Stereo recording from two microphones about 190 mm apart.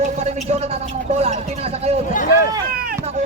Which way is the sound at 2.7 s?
50° right (ahead or behind).